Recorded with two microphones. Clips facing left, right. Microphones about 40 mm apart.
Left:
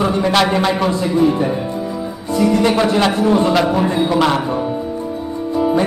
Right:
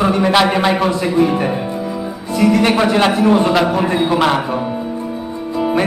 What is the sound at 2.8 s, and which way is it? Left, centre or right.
Speech, centre.